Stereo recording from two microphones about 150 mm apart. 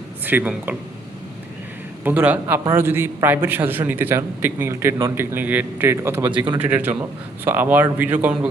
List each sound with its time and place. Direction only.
0.3 s a man's voice: 10° right (ahead or behind)
2.0 s a man's voice: 10° right (ahead or behind)
6.3 s speech: 30° right (ahead or behind)
6.6 s a man's voice: 10° right (ahead or behind)